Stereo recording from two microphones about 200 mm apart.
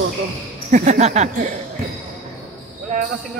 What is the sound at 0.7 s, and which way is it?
Speech, 35° right (ahead or behind).